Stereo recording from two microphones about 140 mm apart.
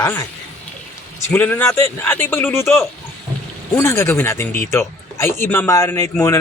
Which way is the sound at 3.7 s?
20° left (ahead or behind).